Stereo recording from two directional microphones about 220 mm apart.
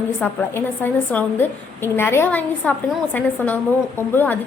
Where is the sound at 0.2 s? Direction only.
5° left (ahead or behind).